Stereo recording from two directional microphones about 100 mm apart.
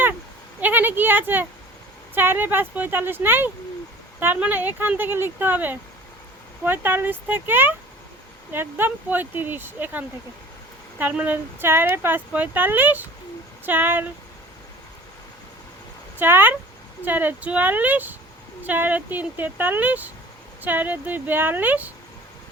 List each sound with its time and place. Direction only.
0.6 s speech: 20° right (ahead or behind)
16.1 s speech: 20° right (ahead or behind)